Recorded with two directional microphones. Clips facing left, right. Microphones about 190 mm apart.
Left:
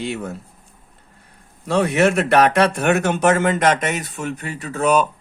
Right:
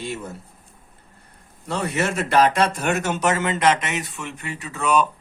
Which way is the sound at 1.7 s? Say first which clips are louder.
Left 8 dB; 70° left (ahead or behind).